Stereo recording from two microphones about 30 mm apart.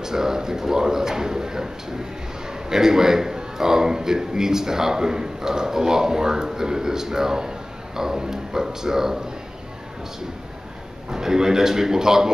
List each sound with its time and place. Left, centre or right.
0.0 s speech: centre
2.7 s a man's voice: centre
11.1 s a man's voice: centre